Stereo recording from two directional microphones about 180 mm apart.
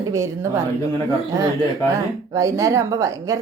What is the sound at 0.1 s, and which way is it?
Speech, 15° right (ahead or behind).